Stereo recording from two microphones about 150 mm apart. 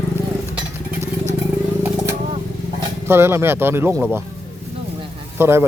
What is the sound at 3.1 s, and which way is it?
Speech, 15° right (ahead or behind).